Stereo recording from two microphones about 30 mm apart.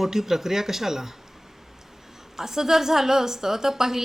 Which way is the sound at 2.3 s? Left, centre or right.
Centre.